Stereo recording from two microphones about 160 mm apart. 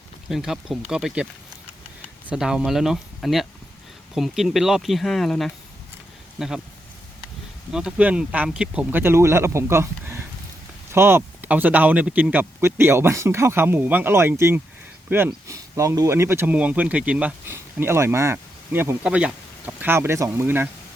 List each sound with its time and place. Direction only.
0.3 s speech: centre (ahead or behind)
2.3 s speech: 5° right (ahead or behind)
7.7 s speech: 5° right (ahead or behind)